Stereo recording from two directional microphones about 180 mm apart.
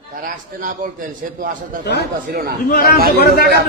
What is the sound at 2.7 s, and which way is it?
Speech, 60° left (ahead or behind).